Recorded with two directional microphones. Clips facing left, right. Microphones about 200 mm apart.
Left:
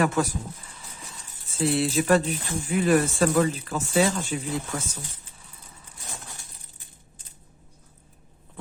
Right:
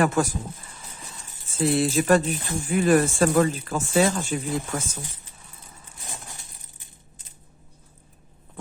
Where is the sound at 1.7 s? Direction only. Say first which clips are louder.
Right 2 dB; 45° right (ahead or behind).